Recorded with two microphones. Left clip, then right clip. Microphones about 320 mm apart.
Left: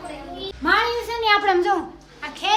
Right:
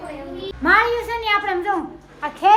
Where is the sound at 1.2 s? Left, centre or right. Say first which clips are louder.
Left 4 dB; left.